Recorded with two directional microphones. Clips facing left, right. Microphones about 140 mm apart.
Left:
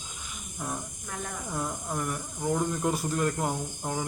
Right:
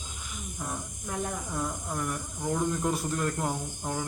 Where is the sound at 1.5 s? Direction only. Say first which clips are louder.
Left 4 dB; 5° left (ahead or behind).